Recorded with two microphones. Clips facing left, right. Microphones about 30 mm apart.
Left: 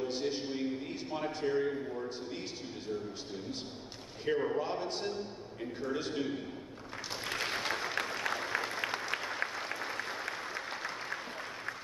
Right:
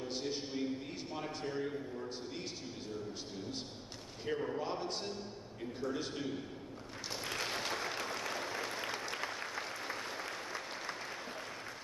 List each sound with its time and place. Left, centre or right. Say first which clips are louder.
0.1 s a sound: left 4 dB; centre
4.3 s a man's voice: left 6 dB; left
4.6 s a man's voice: left 3 dB; centre
7.5 s applause: left 3 dB; left
8.7 s applause: left 4 dB; left